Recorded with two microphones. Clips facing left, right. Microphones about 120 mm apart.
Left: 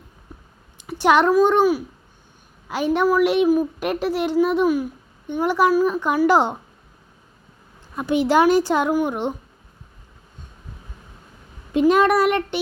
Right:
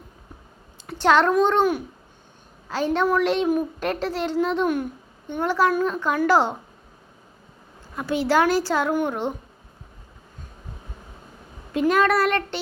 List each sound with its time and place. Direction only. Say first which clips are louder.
0.8 s a child's voice: left 2 dB; 15° left (ahead or behind)
5.3 s a woman's voice: left 3 dB; 15° left (ahead or behind)
7.9 s a woman's voice: left 3 dB; 20° left (ahead or behind)
11.7 s a woman's voice: left 4 dB; 20° left (ahead or behind)